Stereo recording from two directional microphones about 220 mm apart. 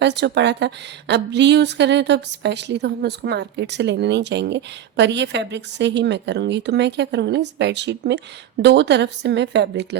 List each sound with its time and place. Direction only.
0.0 s a woman's voice: 50° right (ahead or behind)